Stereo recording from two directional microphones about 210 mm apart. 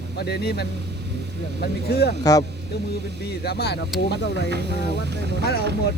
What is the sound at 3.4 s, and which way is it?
Speech, 50° left (ahead or behind).